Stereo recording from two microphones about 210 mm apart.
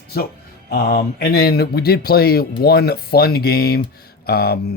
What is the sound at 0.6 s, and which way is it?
Speech, 50° left (ahead or behind).